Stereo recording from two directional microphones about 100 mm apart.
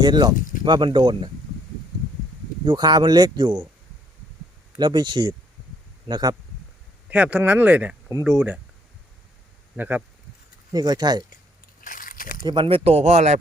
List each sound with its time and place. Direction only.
0.0 s speech: 45° right (ahead or behind)
2.6 s speech: 45° right (ahead or behind)
4.8 s speech: 50° right (ahead or behind)
7.1 s speech: 15° right (ahead or behind)
9.7 s speech: 20° right (ahead or behind)
10.7 s speech: 40° right (ahead or behind)
12.4 s speech: 50° right (ahead or behind)
12.6 s speech: 80° right